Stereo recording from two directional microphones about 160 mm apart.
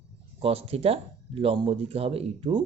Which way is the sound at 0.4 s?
35° right (ahead or behind).